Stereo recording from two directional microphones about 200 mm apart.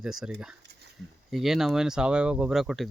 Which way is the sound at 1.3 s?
Centre (ahead or behind).